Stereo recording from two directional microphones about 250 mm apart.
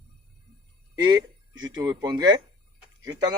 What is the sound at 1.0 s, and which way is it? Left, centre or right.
A man's voice, centre.